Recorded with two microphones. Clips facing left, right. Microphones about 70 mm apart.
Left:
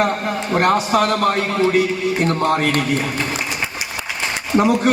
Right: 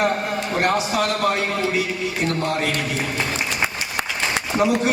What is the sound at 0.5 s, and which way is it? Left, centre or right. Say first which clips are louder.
A man's voice: left 5 dB; left.